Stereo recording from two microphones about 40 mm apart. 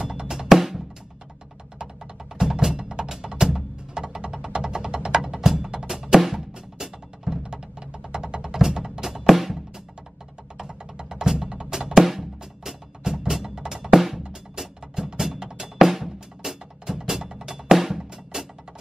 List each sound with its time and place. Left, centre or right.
0.0 s drum: centre
2.3 s music: centre
10.6 s music: right
14.2 s drum: right
14.6 s music: centre
15.8 s music: centre